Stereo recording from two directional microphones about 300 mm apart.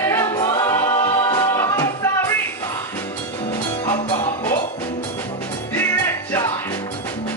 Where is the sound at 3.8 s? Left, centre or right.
Centre.